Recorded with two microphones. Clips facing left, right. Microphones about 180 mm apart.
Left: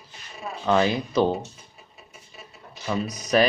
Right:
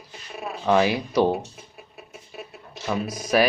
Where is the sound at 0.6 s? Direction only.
10° right (ahead or behind).